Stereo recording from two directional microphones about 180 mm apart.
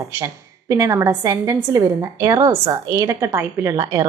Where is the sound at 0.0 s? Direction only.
15° right (ahead or behind).